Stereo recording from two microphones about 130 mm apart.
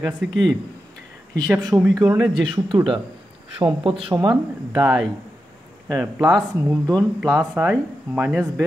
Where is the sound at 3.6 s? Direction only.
40° right (ahead or behind).